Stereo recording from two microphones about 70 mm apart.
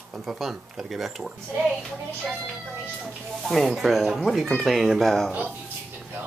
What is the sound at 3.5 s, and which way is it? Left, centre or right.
Speech, centre.